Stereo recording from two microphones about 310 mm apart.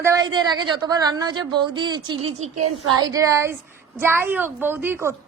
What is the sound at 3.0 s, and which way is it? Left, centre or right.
A woman's voice, centre.